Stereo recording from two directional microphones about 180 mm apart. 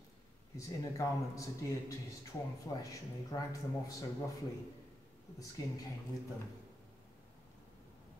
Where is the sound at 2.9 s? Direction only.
20° left (ahead or behind).